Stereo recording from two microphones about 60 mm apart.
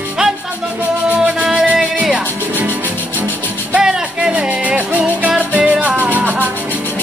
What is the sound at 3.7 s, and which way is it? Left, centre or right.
Music, centre.